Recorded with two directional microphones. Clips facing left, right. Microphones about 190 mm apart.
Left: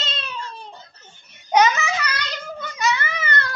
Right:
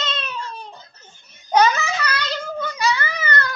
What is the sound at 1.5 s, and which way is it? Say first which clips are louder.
Babbling: right 1 dB; 15° left (ahead or behind).